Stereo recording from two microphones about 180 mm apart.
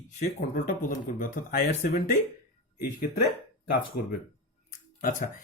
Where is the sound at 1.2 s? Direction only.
55° left (ahead or behind).